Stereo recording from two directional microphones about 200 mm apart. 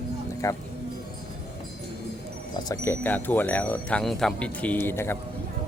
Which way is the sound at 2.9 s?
10° left (ahead or behind).